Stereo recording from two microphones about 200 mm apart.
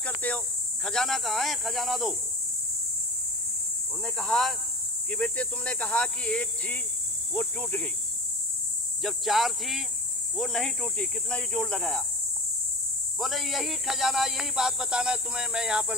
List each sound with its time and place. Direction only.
0.0 s speech: 5° left (ahead or behind)
4.0 s speech: centre (ahead or behind)
9.0 s speech: centre (ahead or behind)
13.2 s speech: centre (ahead or behind)